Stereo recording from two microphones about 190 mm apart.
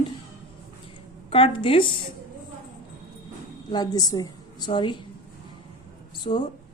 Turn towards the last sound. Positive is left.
turn(degrees=25)  # may be behind; listen again after turning